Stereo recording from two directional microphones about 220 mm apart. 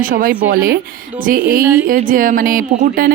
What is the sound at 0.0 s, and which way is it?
Speech, 40° right (ahead or behind).